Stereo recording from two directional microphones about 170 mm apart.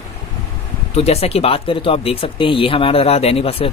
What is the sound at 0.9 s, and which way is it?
Speech, 40° left (ahead or behind).